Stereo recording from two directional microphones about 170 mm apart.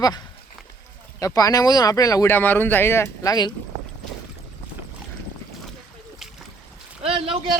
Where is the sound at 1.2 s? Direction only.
20° left (ahead or behind).